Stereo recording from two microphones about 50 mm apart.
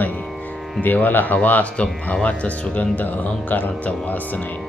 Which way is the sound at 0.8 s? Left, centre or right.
Left.